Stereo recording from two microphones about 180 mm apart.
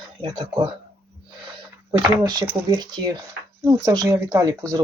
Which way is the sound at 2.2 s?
20° right (ahead or behind).